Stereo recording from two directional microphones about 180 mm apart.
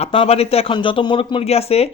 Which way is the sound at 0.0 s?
30° left (ahead or behind).